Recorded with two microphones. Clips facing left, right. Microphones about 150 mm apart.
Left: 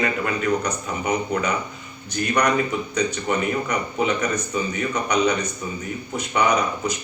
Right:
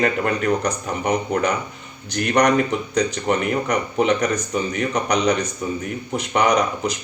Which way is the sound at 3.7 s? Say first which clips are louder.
Right 4 dB; 50° right (ahead or behind).